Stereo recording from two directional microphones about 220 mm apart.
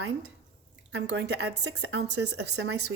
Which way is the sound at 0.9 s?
65° right (ahead or behind).